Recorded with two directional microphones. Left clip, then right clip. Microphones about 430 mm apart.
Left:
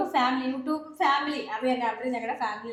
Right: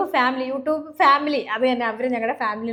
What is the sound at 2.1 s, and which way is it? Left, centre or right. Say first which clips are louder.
Speech: right 7 dB; right.